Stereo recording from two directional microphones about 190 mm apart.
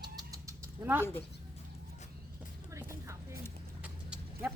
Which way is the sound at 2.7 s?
15° right (ahead or behind).